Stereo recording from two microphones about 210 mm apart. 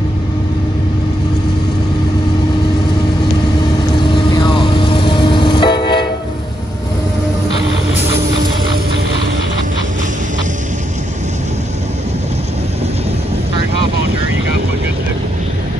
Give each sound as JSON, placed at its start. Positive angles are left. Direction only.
{"t": 4.4, "sound": "vehicle", "side_deg": 25}